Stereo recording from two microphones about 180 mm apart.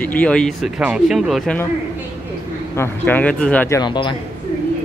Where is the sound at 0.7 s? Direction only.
5° right (ahead or behind).